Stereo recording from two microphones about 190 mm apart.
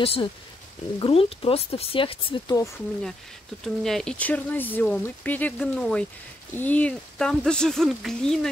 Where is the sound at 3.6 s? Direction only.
Centre (ahead or behind).